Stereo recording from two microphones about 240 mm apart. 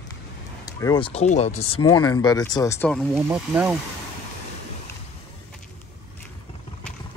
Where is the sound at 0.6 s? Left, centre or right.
Centre.